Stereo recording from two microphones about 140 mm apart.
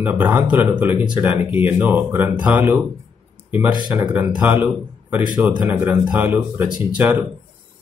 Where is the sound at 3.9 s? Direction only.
10° right (ahead or behind).